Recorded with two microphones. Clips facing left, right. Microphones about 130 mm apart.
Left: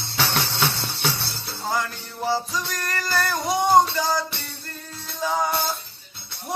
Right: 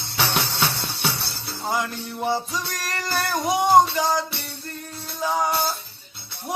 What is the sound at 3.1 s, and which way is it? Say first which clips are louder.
Child singing: right 1 dB; 15° right (ahead or behind).